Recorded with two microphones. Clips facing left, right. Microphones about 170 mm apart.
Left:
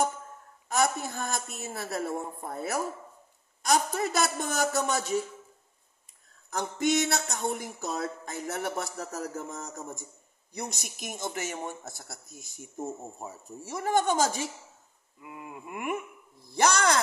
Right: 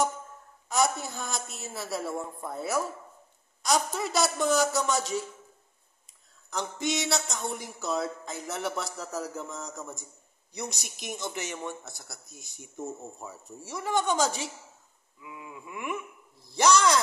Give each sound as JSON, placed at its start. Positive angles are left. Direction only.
{"t": 0.7, "sound": "speech", "side_deg": 55}
{"t": 6.5, "sound": "speech", "side_deg": 50}
{"t": 15.1, "sound": "wail", "side_deg": 50}
{"t": 16.5, "sound": "speech", "side_deg": 55}